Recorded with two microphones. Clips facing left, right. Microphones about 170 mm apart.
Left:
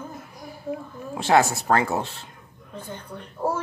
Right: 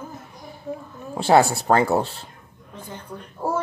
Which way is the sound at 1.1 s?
30° right (ahead or behind).